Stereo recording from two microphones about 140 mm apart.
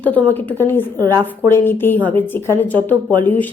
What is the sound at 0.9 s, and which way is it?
Speech, 25° right (ahead or behind).